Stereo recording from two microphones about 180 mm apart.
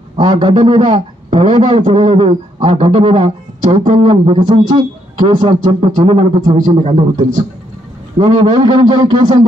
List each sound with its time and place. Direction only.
0.1 s a man's voice: 25° right (ahead or behind)
1.8 s a man's voice: 45° right (ahead or behind)
2.0 s a man's voice: 30° right (ahead or behind)